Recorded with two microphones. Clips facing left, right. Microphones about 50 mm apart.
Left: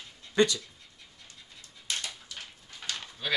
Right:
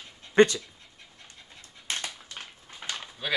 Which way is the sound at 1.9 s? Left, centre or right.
Right.